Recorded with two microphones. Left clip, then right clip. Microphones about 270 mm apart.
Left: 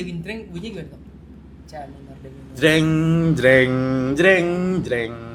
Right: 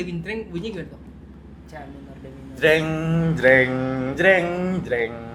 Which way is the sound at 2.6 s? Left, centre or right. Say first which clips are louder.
Left 1 dB; left.